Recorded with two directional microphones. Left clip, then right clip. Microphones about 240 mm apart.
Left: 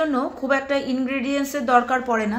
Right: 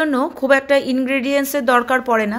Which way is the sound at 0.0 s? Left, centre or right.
Right.